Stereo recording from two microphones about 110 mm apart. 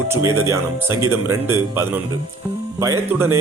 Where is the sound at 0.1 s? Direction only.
25° right (ahead or behind).